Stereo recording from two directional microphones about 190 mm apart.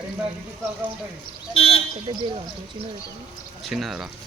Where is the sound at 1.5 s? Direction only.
30° left (ahead or behind).